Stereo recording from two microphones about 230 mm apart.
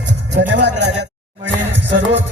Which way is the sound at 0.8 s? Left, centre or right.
Right.